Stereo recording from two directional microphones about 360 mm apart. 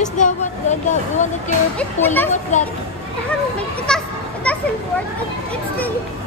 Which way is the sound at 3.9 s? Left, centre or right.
Centre.